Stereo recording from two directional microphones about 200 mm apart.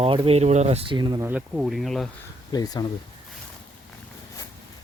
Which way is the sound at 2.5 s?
20° left (ahead or behind).